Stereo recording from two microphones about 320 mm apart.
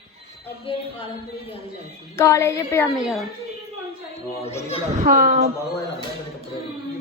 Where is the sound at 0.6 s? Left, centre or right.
Centre.